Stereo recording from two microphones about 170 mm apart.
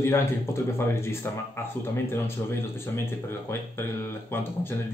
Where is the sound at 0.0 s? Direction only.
15° left (ahead or behind).